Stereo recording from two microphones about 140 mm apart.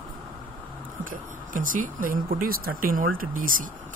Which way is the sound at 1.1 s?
75° right (ahead or behind).